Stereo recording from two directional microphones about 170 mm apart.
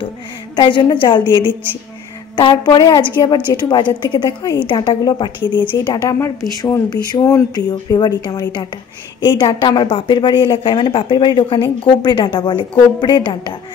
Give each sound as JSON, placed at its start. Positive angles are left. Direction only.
{"t": 0.6, "sound": "a woman's voice", "side_deg": 25}